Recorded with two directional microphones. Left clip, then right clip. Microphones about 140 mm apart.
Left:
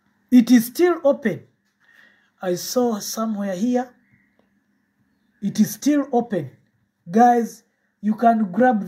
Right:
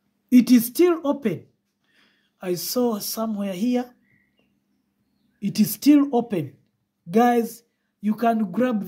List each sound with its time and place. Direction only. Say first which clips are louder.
0.3 s speech: left 2 dB; 45° right (ahead or behind)
5.6 s speech: right 3 dB; 45° right (ahead or behind)